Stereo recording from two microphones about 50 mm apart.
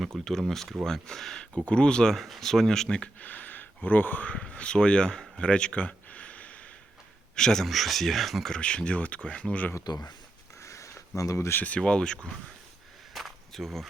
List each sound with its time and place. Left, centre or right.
0.3 s speech: centre
1.5 s speech: left
2.2 s speech: centre; by 4.4 s left
4.4 s speech: left
5.4 s a sound: centre
7.3 s speech: centre
8.4 s speech: centre
10.6 s a sound: left
11.2 s speech: left
11.8 s speech: centre
13.1 s a sound: centre